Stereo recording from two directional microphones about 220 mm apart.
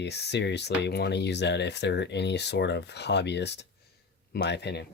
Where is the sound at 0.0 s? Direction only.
50° left (ahead or behind).